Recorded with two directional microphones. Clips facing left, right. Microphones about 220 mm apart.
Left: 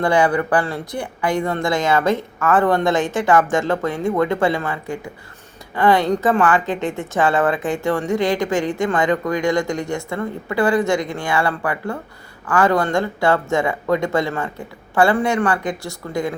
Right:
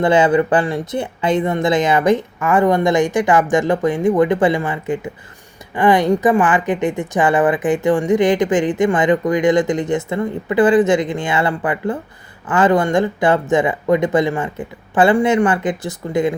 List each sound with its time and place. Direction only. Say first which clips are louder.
0.0 s a woman's voice: right 4 dB; 20° right (ahead or behind)